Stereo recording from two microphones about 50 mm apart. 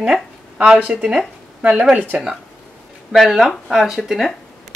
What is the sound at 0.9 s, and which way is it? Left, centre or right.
Speech, centre.